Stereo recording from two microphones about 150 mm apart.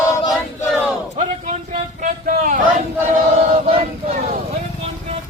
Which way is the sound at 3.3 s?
45° right (ahead or behind).